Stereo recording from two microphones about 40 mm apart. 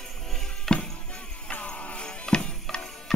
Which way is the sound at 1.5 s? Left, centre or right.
Left.